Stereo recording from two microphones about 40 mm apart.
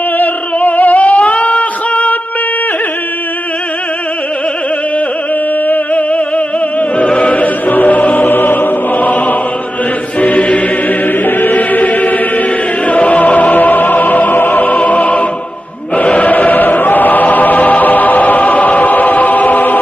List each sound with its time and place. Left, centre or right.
0.2 s music: left
5.9 s music: left
7.1 s music: left
7.3 s choir: left
8.3 s music: left
11.1 s music: left
16.0 s choir: left